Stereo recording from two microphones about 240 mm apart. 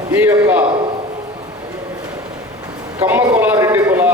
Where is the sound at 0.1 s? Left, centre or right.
Centre.